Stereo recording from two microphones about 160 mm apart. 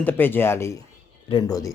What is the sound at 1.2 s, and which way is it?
Speech, 35° left (ahead or behind).